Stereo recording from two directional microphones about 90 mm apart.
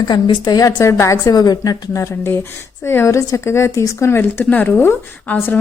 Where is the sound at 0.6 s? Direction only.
40° left (ahead or behind).